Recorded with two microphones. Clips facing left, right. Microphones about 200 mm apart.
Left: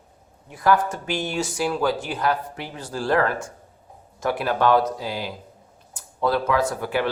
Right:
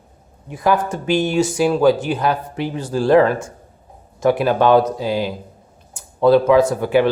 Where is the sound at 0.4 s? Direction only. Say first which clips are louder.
Right 2 dB; 20° right (ahead or behind).